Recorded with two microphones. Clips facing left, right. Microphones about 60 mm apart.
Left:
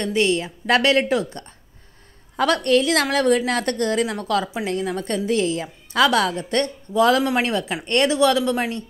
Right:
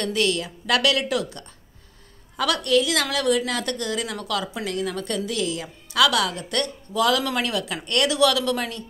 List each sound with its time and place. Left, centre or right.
0.0 s a woman's voice: left